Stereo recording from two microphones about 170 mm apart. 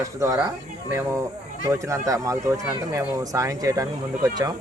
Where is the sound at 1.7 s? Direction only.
20° right (ahead or behind).